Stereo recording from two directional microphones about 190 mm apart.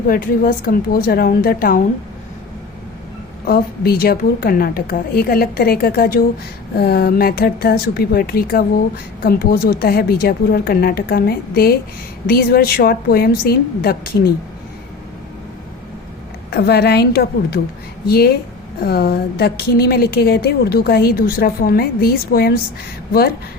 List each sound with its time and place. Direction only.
0.1 s a woman's voice: 50° left (ahead or behind)
3.4 s a woman's voice: 50° left (ahead or behind)
16.5 s a woman's voice: 60° left (ahead or behind)